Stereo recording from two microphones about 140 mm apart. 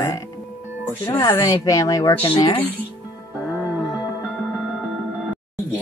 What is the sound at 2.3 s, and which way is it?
Speech, 35° left (ahead or behind).